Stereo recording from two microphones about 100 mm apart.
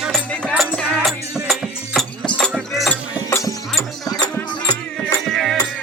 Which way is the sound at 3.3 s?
35° left (ahead or behind).